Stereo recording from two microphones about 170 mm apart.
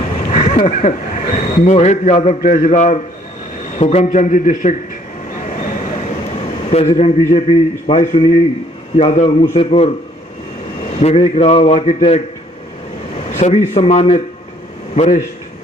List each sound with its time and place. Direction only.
0.3 s a man's voice: 40° left (ahead or behind)
2.4 s a man's voice: 50° left (ahead or behind)
6.7 s a man's voice: 40° left (ahead or behind)
11.0 s a man's voice: 35° left (ahead or behind)
13.3 s a man's voice: 40° left (ahead or behind)